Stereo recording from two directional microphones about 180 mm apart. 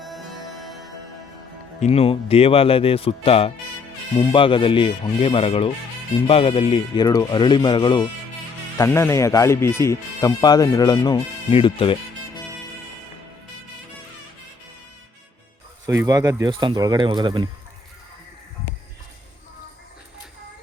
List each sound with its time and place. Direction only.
0.0 s music: centre (ahead or behind)
1.8 s speech: 35° left (ahead or behind)
8.8 s speech: 15° left (ahead or behind)
15.9 s speech: 20° right (ahead or behind)